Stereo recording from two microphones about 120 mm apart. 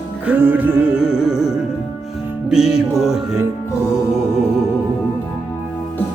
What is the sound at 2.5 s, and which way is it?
Music, 5° right (ahead or behind).